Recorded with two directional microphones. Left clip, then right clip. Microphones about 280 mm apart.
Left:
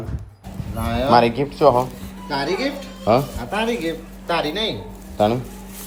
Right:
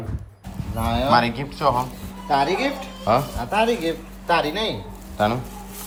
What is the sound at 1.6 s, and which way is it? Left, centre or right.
Speech, right.